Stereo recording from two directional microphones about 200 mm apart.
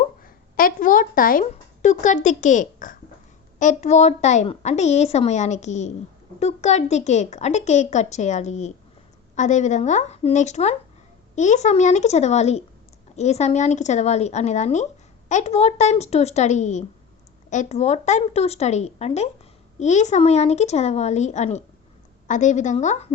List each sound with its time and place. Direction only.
0.2 s a woman's voice: 45° left (ahead or behind)